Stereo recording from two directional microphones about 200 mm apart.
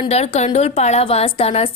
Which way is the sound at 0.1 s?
30° left (ahead or behind).